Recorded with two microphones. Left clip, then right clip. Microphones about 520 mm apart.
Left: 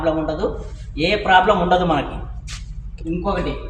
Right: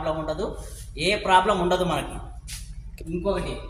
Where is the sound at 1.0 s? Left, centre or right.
Right.